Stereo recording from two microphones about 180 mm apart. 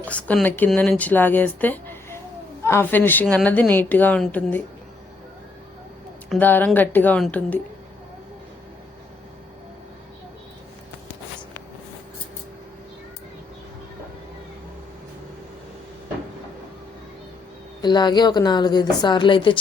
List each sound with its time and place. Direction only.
0.0 s speech: 10° left (ahead or behind)
6.2 s speech: centre (ahead or behind)
17.8 s a woman's voice: 25° left (ahead or behind)